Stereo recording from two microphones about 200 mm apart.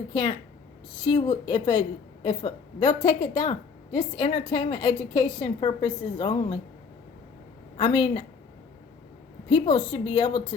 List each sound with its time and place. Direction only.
0.1 s a woman's voice: 20° left (ahead or behind)
7.8 s a woman's voice: 25° left (ahead or behind)
9.5 s a woman's voice: 25° left (ahead or behind)